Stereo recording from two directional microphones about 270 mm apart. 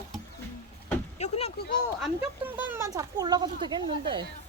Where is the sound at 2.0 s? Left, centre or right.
Centre.